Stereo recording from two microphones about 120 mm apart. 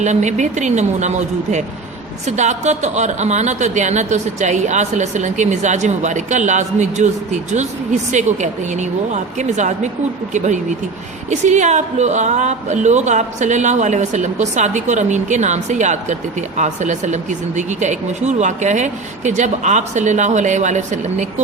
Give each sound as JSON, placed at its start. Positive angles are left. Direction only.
{"t": 0.0, "sound": "a woman's voice", "side_deg": -75}
{"t": 8.1, "sound": "a woman's voice", "side_deg": -80}